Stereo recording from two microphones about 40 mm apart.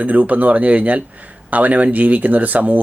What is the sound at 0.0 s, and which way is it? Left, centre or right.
Speech, right.